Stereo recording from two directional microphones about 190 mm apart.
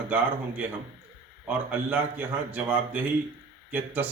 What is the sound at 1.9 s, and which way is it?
A man's voice, 10° right (ahead or behind).